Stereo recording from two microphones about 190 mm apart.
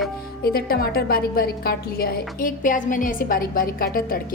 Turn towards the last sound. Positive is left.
turn(degrees=50)  # may be behind; listen again after turning